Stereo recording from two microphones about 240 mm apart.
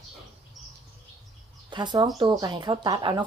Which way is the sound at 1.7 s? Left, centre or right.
Centre.